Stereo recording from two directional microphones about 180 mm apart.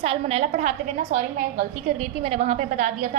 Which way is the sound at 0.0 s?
35° right (ahead or behind).